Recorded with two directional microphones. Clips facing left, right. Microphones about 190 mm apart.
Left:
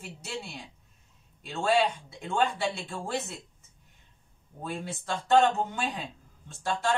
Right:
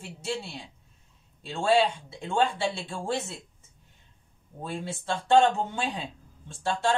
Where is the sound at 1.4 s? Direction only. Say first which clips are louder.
Right 2 dB; 25° right (ahead or behind).